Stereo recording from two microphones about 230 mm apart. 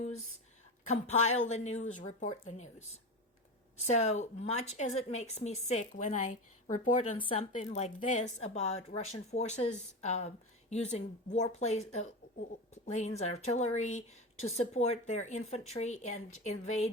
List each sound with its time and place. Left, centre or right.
0.9 s a woman's voice: left